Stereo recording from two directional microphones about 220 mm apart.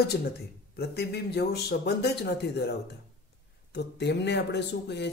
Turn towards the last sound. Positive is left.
turn(degrees=50)  # may be behind; listen again after turning